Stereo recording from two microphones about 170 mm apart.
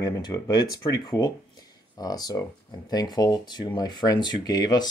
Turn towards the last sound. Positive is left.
turn(degrees=25)  # may be behind; listen again after turning